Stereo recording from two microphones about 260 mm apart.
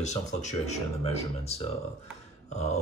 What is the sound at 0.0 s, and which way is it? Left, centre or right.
Speech, left.